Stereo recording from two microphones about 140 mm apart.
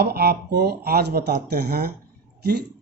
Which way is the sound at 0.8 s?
90° right.